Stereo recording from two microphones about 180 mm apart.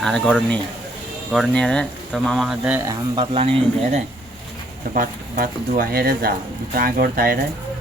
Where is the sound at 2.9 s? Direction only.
30° right (ahead or behind).